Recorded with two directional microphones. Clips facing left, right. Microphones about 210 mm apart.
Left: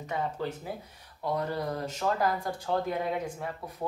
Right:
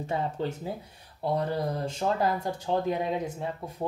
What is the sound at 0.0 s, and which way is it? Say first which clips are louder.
Speech: right 3 dB; 30° right (ahead or behind).